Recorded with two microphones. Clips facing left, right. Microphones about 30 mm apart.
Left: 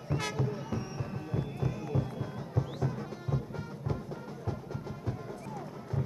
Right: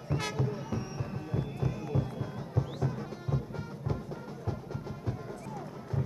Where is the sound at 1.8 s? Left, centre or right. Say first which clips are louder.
Even; centre.